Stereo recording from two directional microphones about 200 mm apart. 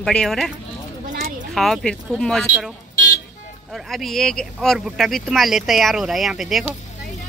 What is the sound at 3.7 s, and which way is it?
Speech, centre (ahead or behind).